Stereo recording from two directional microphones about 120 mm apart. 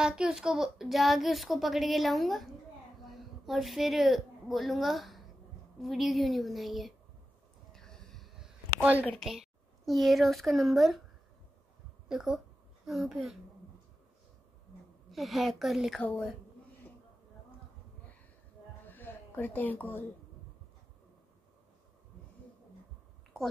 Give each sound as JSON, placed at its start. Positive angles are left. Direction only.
{"t": 0.0, "sound": "a woman's voice", "side_deg": -5}
{"t": 7.7, "sound": "a sound", "side_deg": 5}
{"t": 9.0, "sound": "speech", "side_deg": 0}
{"t": 12.1, "sound": "speech", "side_deg": -5}
{"t": 15.0, "sound": "speech", "side_deg": 0}
{"t": 16.0, "sound": "a woman's voice", "side_deg": 10}
{"t": 18.9, "sound": "a sound", "side_deg": 15}
{"t": 23.3, "sound": "a woman's voice", "side_deg": 5}